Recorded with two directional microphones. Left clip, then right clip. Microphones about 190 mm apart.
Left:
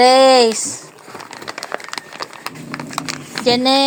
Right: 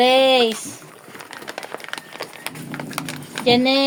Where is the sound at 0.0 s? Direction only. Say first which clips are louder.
Left 5 dB; 25° left (ahead or behind).